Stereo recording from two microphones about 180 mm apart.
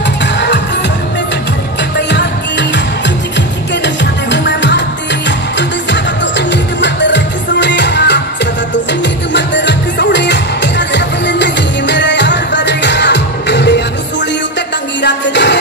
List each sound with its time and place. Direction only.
0.2 s music: 75° left (ahead or behind)
2.0 s music: 75° left (ahead or behind)
9.3 s music: 80° left
15.0 s music: 75° left (ahead or behind)